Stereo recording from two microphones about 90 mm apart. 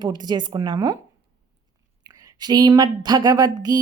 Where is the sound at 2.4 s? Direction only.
50° right (ahead or behind).